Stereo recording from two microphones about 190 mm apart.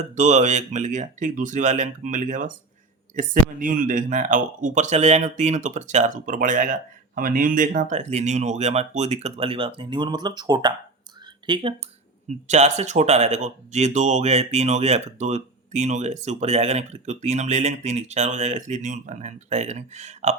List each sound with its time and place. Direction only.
0.1 s speech: 40° right (ahead or behind)
12.3 s speech: 35° right (ahead or behind)